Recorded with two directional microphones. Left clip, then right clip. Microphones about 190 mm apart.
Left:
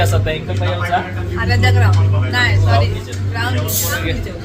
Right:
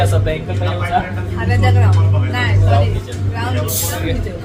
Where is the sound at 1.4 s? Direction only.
10° right (ahead or behind).